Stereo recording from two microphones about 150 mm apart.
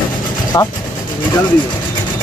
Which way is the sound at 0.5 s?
20° left (ahead or behind).